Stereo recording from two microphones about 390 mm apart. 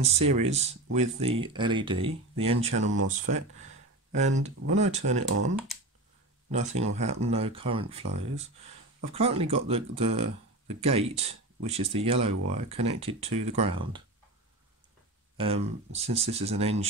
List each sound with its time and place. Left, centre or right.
0.0 s speech: centre
6.5 s speech: centre
15.3 s speech: centre